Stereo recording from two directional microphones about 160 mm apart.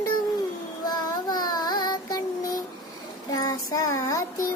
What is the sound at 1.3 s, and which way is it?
Child singing, 25° left (ahead or behind).